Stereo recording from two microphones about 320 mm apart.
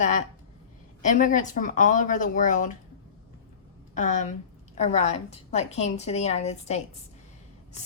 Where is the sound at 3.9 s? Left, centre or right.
Left.